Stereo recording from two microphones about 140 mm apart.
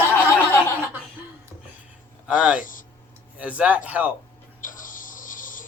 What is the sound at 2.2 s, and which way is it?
Speech, 5° right (ahead or behind).